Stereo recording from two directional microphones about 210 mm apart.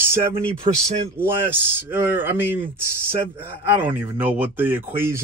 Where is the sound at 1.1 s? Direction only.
10° right (ahead or behind).